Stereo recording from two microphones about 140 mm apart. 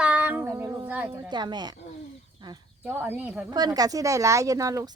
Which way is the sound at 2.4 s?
35° right (ahead or behind).